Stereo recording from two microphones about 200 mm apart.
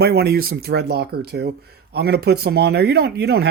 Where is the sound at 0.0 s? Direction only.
55° right (ahead or behind).